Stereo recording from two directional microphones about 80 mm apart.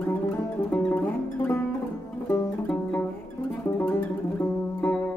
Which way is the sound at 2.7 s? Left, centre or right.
Centre.